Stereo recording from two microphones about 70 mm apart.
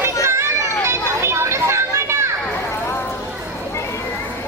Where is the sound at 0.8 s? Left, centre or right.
Right.